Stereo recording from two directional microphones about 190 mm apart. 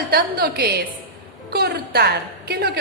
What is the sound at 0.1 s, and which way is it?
A woman's voice, 55° right (ahead or behind).